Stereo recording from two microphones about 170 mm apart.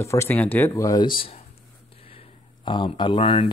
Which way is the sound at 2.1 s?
30° left (ahead or behind).